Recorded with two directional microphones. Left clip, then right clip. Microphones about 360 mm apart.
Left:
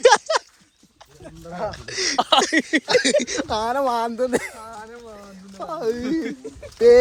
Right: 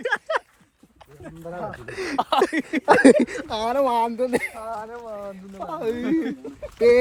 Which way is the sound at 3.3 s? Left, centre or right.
Centre.